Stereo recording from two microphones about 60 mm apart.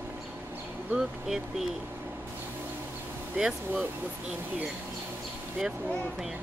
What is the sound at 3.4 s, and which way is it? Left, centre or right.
Speech, centre.